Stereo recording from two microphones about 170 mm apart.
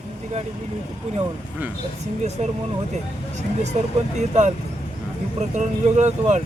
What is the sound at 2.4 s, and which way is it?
Speech, 40° right (ahead or behind).